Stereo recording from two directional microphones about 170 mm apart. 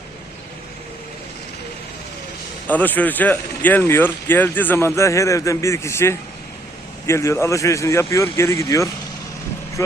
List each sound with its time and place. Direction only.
2.6 s speech: 10° left (ahead or behind)